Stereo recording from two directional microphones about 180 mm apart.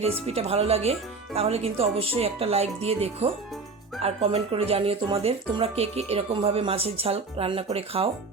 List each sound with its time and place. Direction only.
0.3 s speech: 35° right (ahead or behind)